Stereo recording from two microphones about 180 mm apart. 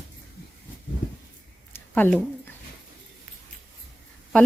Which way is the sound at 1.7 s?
10° left (ahead or behind).